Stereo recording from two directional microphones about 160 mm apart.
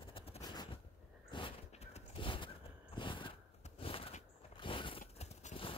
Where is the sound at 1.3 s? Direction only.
35° left (ahead or behind).